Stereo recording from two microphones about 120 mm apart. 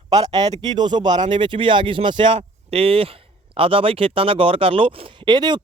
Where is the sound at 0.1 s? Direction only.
35° right (ahead or behind).